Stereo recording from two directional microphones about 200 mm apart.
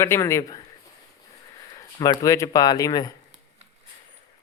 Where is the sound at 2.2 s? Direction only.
15° left (ahead or behind).